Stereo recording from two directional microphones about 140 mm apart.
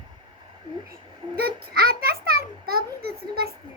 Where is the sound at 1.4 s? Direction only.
90° right.